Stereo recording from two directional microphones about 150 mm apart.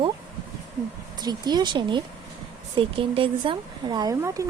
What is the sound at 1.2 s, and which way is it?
Speech, 30° right (ahead or behind).